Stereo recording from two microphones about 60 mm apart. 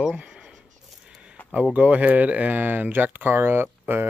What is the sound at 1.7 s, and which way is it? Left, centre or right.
Speech, right.